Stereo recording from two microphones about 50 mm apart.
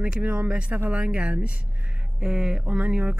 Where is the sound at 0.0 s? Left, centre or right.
Right.